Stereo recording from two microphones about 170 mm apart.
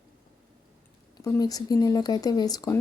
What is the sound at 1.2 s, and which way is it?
Speech, 20° left (ahead or behind).